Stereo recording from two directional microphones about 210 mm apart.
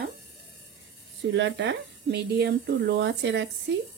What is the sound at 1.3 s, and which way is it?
Speech, 60° right (ahead or behind).